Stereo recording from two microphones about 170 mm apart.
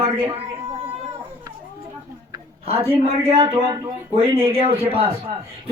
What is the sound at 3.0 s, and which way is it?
Speech, 35° right (ahead or behind).